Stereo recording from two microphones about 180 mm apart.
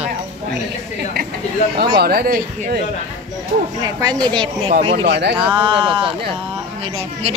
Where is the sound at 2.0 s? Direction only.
55° right (ahead or behind).